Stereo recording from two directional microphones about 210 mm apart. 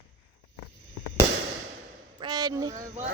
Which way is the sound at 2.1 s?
20° right (ahead or behind).